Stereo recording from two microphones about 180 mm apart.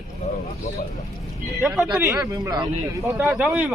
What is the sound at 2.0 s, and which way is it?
Speech, 20° right (ahead or behind).